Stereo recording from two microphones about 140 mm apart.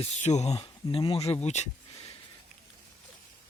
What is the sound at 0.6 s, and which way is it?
Speech, 40° left (ahead or behind).